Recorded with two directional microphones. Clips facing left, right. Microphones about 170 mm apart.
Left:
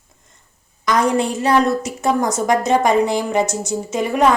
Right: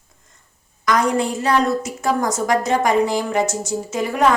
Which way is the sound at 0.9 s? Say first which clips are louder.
Left 1 dB; 20° left (ahead or behind).